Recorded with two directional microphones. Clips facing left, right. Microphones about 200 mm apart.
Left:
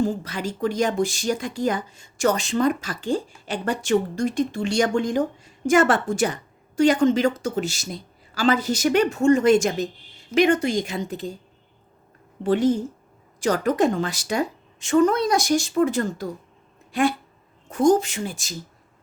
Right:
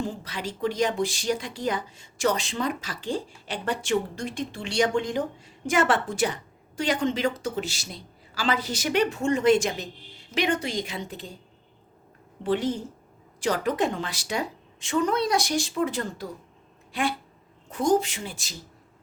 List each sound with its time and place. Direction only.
0.0 s speech: 45° left (ahead or behind)
12.4 s speech: 45° left (ahead or behind)